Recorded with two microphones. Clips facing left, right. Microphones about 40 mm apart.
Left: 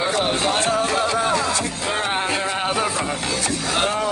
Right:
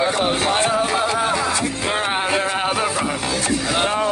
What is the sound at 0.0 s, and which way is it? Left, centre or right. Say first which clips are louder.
Music: right 2 dB; centre.